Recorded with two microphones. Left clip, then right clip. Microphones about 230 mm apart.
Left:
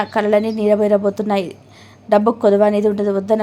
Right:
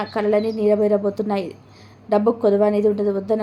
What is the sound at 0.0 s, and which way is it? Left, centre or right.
A woman's voice, centre.